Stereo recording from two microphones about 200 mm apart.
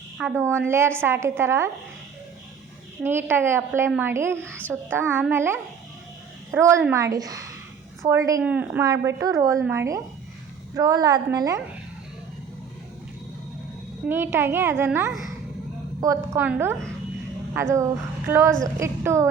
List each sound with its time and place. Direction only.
0.2 s a woman's voice: 10° right (ahead or behind)
3.0 s a woman's voice: 10° right (ahead or behind)
6.6 s a woman's voice: 15° right (ahead or behind)
14.1 s a woman's voice: 10° right (ahead or behind)